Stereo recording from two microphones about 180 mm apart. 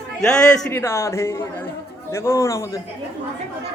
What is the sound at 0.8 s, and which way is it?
Speech, 15° left (ahead or behind).